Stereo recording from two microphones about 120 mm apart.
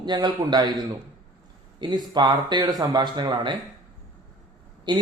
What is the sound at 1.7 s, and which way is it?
A man's voice, 35° right (ahead or behind).